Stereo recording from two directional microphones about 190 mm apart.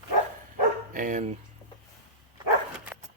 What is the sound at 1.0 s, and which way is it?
Speech, 40° right (ahead or behind).